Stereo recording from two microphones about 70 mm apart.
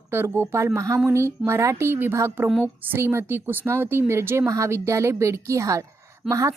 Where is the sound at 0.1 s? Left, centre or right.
Right.